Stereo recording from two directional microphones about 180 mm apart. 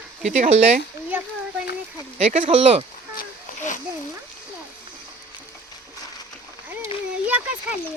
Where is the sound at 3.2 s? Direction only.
45° left (ahead or behind).